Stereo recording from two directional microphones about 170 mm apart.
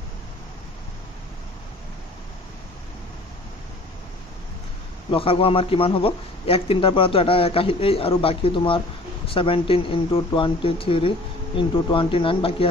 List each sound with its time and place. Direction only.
5.1 s a man's voice: 35° left (ahead or behind)